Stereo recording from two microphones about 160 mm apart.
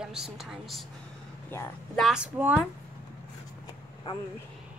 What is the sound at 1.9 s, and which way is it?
Speech, 5° right (ahead or behind).